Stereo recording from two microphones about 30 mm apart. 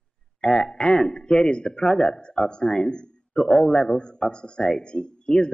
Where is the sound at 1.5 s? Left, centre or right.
Centre.